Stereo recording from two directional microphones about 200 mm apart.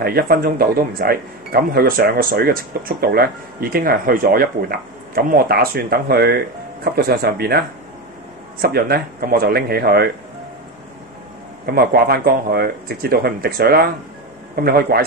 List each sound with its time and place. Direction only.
0.0 s speech: 50° right (ahead or behind)
11.6 s speech: 50° right (ahead or behind)